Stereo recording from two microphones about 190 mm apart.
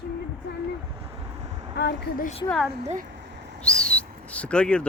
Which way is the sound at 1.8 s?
60° left (ahead or behind).